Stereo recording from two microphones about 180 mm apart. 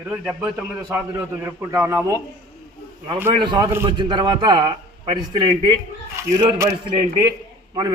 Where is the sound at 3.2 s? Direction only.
25° right (ahead or behind).